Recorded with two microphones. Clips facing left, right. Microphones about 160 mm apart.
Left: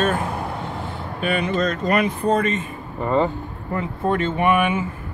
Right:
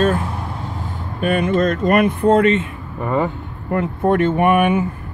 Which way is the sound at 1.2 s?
45° right (ahead or behind).